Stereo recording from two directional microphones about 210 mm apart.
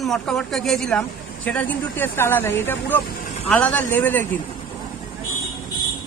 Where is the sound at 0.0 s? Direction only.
Centre (ahead or behind).